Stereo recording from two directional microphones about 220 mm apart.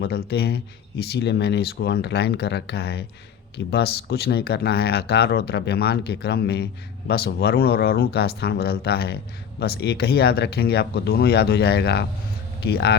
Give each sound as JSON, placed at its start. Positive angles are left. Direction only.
{"t": 0.0, "sound": "speech", "side_deg": 50}